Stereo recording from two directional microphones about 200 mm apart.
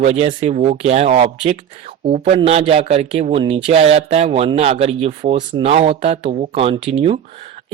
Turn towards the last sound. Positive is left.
turn(degrees=-30)  # may be behind; listen again after turning